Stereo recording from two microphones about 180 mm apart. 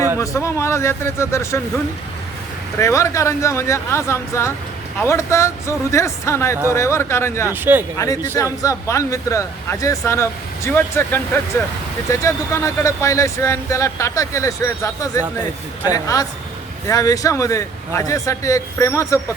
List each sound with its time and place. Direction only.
0.2 s speech: 15° left (ahead or behind)
2.7 s speech: 15° left (ahead or behind)
7.5 s speech: 10° right (ahead or behind)
7.9 s speech: 20° left (ahead or behind)